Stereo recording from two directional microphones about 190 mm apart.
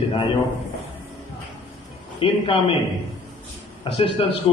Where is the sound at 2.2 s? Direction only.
30° left (ahead or behind).